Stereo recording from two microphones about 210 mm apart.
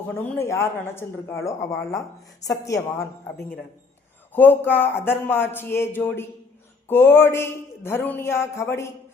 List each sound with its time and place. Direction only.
0.2 s speech: 10° left (ahead or behind)
4.3 s speech: 10° left (ahead or behind)